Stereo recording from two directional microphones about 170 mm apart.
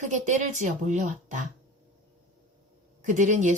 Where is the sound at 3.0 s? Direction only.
45° right (ahead or behind).